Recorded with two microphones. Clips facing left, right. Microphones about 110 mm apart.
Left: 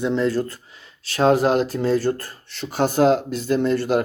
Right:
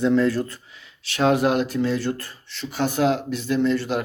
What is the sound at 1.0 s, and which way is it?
Speech, 35° left (ahead or behind).